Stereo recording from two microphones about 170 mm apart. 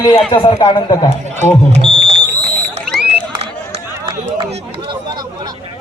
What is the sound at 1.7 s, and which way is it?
Speech, 35° right (ahead or behind).